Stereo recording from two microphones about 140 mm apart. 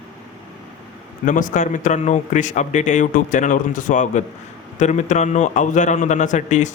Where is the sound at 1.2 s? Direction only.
65° left (ahead or behind).